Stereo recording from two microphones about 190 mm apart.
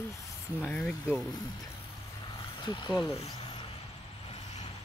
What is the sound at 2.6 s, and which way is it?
Speech, 25° left (ahead or behind).